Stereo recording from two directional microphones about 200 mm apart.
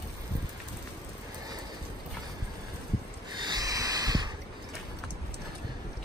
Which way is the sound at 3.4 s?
20° right (ahead or behind).